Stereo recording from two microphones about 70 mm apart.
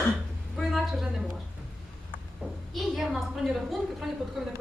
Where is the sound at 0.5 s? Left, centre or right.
Centre.